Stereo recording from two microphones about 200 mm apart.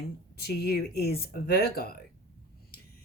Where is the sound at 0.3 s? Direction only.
50° left (ahead or behind).